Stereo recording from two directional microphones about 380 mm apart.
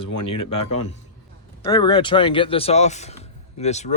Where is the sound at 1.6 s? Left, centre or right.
Centre.